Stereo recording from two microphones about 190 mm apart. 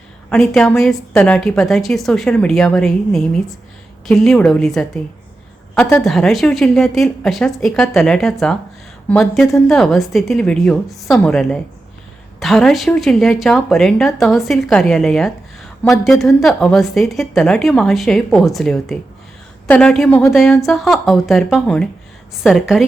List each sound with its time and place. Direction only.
0.3 s a woman's voice: 5° left (ahead or behind)